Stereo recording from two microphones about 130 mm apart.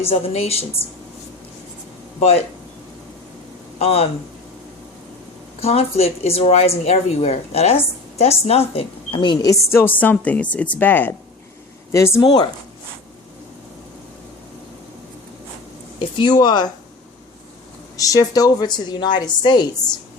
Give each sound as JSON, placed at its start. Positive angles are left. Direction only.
{"t": 0.0, "sound": "speech", "side_deg": 50}
{"t": 3.8, "sound": "speech", "side_deg": 50}
{"t": 5.5, "sound": "speech", "side_deg": 50}
{"t": 9.6, "sound": "a woman's voice", "side_deg": 20}
{"t": 12.2, "sound": "a woman's voice", "side_deg": 30}
{"t": 16.0, "sound": "speech", "side_deg": 35}
{"t": 17.9, "sound": "a woman's voice", "side_deg": 25}